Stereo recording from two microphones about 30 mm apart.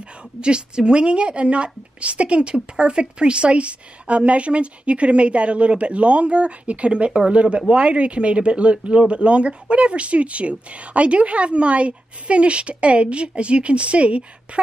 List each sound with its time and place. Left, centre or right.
0.4 s speech: right
2.5 s a woman's voice: right